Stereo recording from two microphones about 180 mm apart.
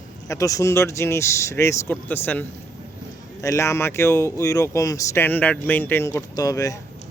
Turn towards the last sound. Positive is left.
turn(degrees=20)  # may be behind; listen again after turning